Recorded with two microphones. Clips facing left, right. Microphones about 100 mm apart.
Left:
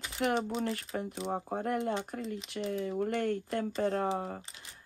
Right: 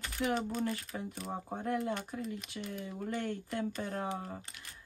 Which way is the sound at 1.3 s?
45° left (ahead or behind).